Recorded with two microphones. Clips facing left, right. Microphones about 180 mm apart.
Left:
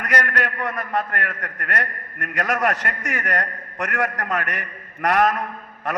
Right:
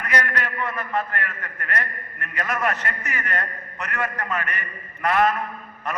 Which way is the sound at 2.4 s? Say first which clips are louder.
Left 3 dB; 80° left.